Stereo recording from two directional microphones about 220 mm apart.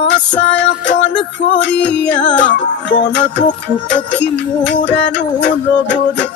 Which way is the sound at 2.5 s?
50° left (ahead or behind).